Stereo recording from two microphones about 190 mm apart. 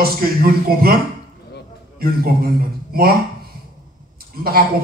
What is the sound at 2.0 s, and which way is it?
A man's voice, 55° right (ahead or behind).